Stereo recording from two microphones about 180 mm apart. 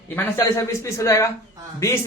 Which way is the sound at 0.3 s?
15° left (ahead or behind).